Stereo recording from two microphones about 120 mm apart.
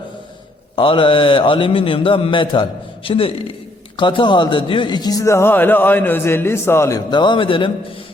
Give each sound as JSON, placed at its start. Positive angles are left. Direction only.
{"t": 0.8, "sound": "a man's voice", "side_deg": 45}
{"t": 7.1, "sound": "speech", "side_deg": 40}